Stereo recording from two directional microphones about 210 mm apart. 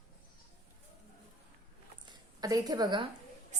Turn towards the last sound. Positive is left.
turn(degrees=-20)  # may be behind; listen again after turning